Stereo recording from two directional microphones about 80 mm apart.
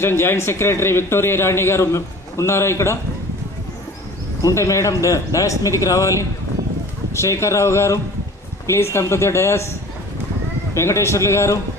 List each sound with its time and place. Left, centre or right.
0.0 s a man's voice: left
4.4 s a man's voice: left
7.2 s a man's voice: left
10.7 s a man's voice: left